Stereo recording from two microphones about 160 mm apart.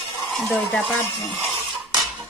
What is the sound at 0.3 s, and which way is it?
Speech, 5° left (ahead or behind).